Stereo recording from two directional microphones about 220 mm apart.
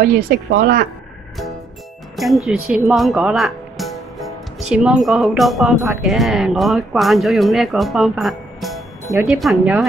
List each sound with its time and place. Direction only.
0.3 s speech: 45° right (ahead or behind)
2.1 s speech: centre (ahead or behind)